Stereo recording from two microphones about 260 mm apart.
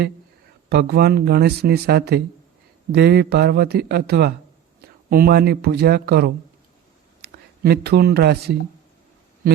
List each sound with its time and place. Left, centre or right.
0.7 s speech: right